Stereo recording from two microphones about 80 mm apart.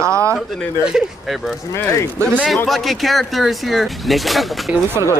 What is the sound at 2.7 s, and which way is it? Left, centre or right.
Speech, centre.